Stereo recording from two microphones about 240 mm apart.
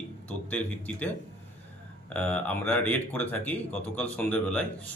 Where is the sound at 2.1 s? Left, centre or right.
Centre.